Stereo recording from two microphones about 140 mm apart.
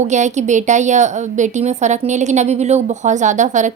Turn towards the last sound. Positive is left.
turn(degrees=-60)  # may be behind; listen again after turning